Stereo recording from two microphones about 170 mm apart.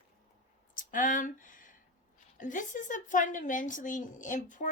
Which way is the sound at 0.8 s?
50° left (ahead or behind).